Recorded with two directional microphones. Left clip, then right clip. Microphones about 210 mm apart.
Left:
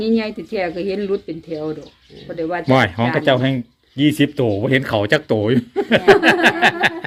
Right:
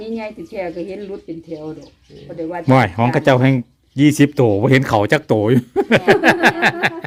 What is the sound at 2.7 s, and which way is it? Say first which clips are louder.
Speech: right 2 dB; 20° right (ahead or behind).